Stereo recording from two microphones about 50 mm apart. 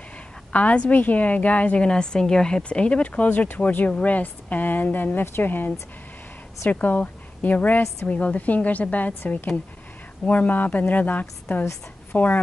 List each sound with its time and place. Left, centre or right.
0.5 s a woman's voice: left
3.3 s speech: left
3.5 s a woman's voice: left
6.7 s a woman's voice: left